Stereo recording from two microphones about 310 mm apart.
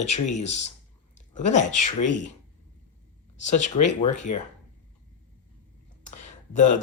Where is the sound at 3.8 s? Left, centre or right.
Left.